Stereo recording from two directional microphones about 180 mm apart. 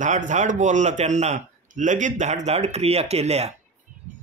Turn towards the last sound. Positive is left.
turn(degrees=-35)  # may be behind; listen again after turning